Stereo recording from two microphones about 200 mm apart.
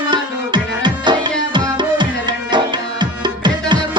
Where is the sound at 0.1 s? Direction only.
20° right (ahead or behind).